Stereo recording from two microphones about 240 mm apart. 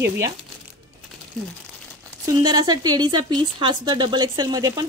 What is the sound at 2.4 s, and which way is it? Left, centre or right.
A woman's voice, centre.